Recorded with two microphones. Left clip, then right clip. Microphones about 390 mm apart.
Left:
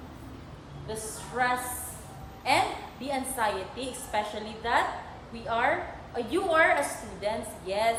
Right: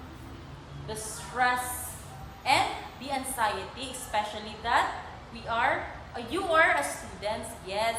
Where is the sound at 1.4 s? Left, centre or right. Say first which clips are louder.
Right 1 dB; centre.